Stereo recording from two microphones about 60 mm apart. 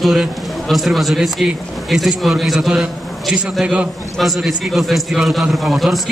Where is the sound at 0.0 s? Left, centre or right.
Centre.